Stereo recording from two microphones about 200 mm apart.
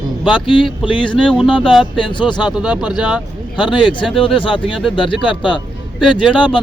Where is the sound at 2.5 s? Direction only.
5° right (ahead or behind).